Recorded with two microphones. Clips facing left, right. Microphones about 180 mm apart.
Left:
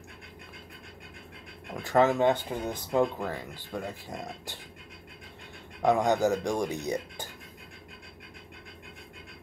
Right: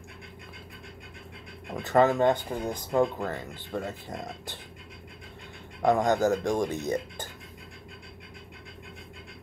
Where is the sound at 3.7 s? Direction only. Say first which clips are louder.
Right 2 dB; centre (ahead or behind).